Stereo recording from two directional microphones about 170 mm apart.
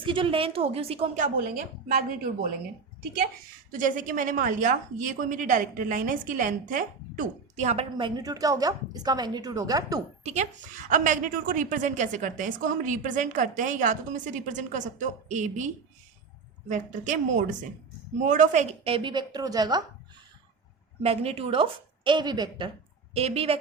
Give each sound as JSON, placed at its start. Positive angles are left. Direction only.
{"t": 0.0, "sound": "speech", "side_deg": -30}
{"t": 3.7, "sound": "a woman's voice", "side_deg": -50}
{"t": 7.9, "sound": "a woman's voice", "side_deg": -25}
{"t": 10.2, "sound": "a woman's voice", "side_deg": -45}
{"t": 18.9, "sound": "a woman's voice", "side_deg": -30}
{"t": 21.0, "sound": "speech", "side_deg": -35}